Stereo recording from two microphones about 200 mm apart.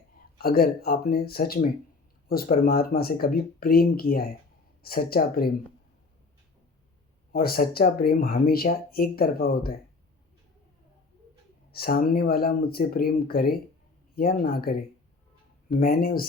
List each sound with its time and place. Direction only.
0.3 s speech: 50° left (ahead or behind)
7.3 s speech: 45° left (ahead or behind)
11.7 s speech: 50° left (ahead or behind)